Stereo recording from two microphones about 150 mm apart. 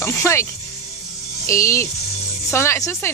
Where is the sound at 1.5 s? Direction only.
20° left (ahead or behind).